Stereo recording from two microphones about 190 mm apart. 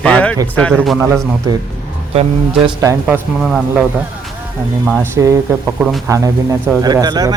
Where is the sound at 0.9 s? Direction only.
15° right (ahead or behind).